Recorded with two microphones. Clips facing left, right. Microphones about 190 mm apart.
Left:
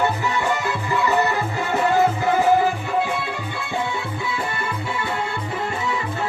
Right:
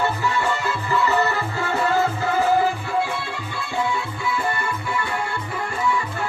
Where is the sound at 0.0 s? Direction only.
20° left (ahead or behind).